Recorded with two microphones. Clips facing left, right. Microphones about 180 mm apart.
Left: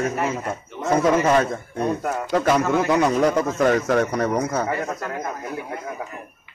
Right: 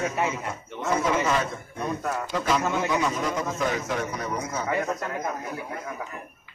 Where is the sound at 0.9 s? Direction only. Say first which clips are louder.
Left 7 dB; 50° left (ahead or behind).